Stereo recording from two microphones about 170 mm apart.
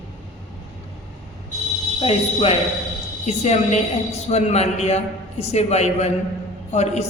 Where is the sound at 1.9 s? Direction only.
35° left (ahead or behind).